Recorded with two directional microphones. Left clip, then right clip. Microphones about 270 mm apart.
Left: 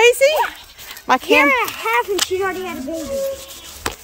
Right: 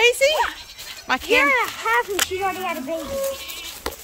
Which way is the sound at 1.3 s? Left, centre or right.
Left.